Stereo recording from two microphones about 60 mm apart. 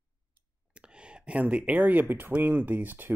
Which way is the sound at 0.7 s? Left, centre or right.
Centre.